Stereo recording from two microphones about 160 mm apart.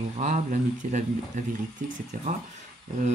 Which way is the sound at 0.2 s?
45° right (ahead or behind).